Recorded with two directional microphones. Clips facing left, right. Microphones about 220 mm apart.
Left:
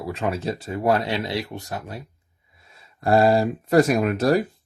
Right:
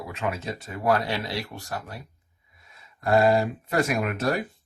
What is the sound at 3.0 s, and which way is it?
Speech, 30° left (ahead or behind).